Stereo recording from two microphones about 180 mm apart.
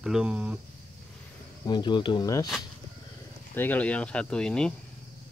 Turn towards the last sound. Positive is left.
turn(degrees=5)  # may be behind; listen again after turning